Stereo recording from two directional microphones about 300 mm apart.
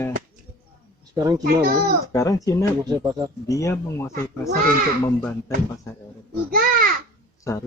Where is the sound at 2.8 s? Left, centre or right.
Centre.